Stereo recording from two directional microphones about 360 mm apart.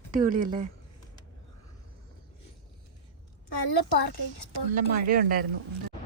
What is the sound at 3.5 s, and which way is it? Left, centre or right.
Speech, left.